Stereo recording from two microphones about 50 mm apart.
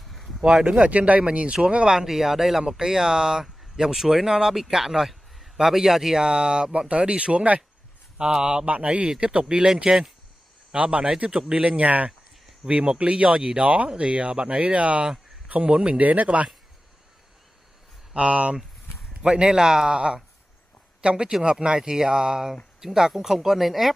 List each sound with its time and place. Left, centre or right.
0.1 s a sound: centre
0.6 s speech: centre
0.8 s speech: right
8.6 s speech: right
16.0 s speech: right
18.1 s speech: right; by 23.9 s centre